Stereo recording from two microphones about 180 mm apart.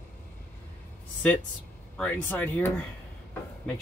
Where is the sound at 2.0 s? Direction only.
10° left (ahead or behind).